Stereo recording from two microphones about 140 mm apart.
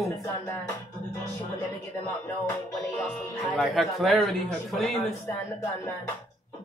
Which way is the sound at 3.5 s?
Centre (ahead or behind).